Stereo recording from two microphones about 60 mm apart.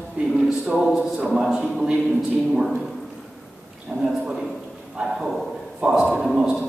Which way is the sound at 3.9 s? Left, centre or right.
Right.